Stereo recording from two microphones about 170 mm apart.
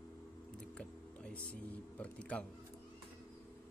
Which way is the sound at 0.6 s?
5° left (ahead or behind).